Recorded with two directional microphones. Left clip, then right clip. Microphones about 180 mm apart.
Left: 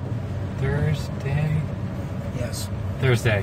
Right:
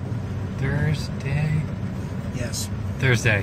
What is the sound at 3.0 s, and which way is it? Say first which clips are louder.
Speech: right 2 dB; 10° left (ahead or behind).